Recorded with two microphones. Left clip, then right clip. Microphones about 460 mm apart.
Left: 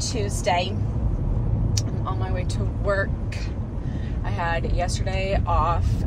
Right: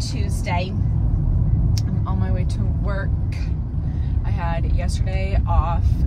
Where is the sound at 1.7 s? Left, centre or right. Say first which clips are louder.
Left 1 dB; centre.